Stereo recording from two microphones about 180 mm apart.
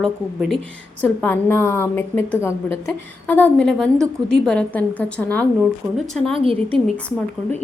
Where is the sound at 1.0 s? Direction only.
10° left (ahead or behind).